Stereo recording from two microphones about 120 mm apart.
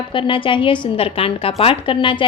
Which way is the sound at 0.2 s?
45° left (ahead or behind).